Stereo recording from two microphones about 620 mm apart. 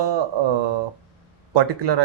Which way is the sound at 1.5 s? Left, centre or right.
Right.